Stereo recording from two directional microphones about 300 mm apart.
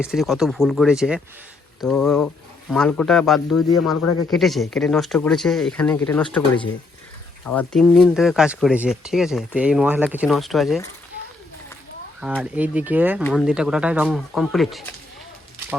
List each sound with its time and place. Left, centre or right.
0.0 s speech: centre
4.0 s speech: left
4.3 s speech: centre
7.4 s speech: centre
12.2 s speech: centre